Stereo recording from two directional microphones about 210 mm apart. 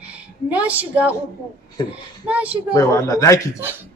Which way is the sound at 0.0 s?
5° right (ahead or behind).